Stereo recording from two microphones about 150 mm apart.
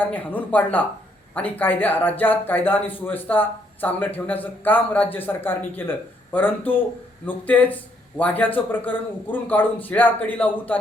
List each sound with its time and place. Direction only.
0.0 s a man's voice: 10° left (ahead or behind)